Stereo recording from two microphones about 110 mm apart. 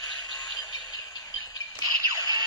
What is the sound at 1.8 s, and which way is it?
Music, 40° right (ahead or behind).